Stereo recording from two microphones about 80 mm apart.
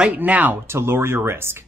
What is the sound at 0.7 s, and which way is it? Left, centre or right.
Speech, right.